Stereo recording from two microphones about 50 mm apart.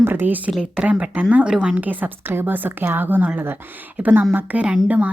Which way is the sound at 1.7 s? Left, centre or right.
Right.